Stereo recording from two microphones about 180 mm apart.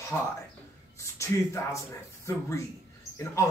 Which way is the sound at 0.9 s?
15° left (ahead or behind).